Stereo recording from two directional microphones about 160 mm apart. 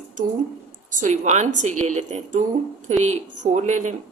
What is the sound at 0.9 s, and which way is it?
A woman's voice, 50° right (ahead or behind).